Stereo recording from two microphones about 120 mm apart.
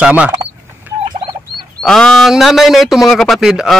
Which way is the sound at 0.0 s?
10° right (ahead or behind).